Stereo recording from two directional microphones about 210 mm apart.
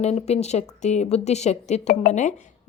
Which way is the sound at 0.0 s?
30° left (ahead or behind).